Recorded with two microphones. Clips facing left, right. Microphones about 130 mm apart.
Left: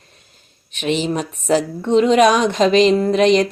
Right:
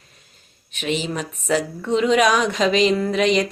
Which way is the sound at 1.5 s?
25° left (ahead or behind).